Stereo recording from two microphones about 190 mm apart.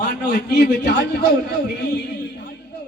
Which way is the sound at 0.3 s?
65° left (ahead or behind).